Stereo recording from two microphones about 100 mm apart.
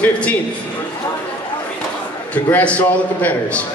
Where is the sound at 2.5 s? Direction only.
15° left (ahead or behind).